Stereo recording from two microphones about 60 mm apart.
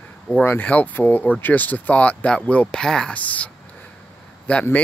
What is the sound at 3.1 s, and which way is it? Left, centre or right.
Speech, left.